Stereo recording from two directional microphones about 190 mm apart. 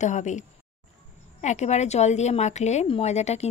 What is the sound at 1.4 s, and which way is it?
A woman's voice, 35° left (ahead or behind).